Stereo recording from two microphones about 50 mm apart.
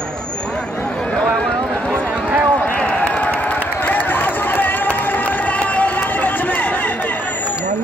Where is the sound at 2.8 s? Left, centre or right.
Left.